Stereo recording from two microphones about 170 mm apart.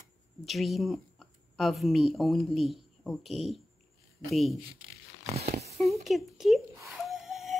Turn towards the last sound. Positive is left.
turn(degrees=0)  # may be behind; listen again after turning